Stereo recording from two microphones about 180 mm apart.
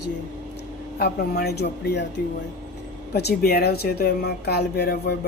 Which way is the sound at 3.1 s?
65° left (ahead or behind).